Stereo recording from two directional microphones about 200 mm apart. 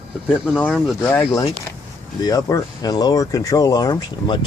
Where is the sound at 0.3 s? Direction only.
5° left (ahead or behind).